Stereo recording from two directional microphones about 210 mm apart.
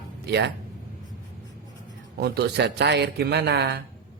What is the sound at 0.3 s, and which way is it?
Speech, 55° right (ahead or behind).